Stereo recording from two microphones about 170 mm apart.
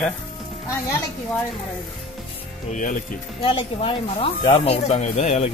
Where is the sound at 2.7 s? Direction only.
50° left (ahead or behind).